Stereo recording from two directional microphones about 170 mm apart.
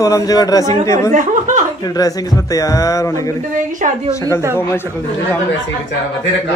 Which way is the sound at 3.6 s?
50° right (ahead or behind).